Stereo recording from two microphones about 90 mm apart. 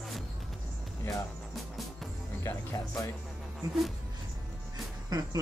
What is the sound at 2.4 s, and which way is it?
Speech, 35° left (ahead or behind).